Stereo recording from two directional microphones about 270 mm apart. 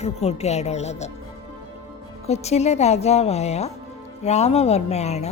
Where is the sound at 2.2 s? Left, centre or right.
Left.